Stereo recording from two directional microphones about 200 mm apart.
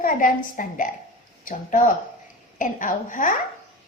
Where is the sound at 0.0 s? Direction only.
40° left (ahead or behind).